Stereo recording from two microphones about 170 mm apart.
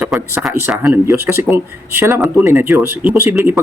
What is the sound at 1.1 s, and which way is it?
Speech, 15° right (ahead or behind).